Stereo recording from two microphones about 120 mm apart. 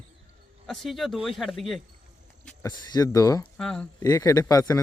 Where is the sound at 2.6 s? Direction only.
30° left (ahead or behind).